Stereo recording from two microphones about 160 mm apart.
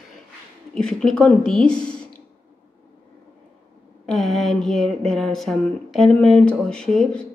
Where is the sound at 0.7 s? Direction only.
5° left (ahead or behind).